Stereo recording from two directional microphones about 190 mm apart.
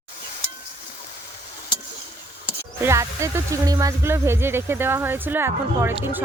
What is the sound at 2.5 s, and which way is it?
Speech, 15° right (ahead or behind).